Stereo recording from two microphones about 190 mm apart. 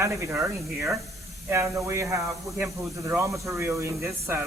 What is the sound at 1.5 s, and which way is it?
Speech, 15° right (ahead or behind).